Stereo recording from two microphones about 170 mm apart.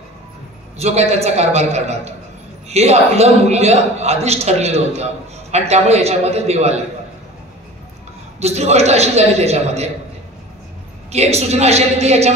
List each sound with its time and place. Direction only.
0.7 s a man's voice: 40° right (ahead or behind)
8.4 s a man's voice: 40° right (ahead or behind)
11.1 s a man's voice: 40° right (ahead or behind)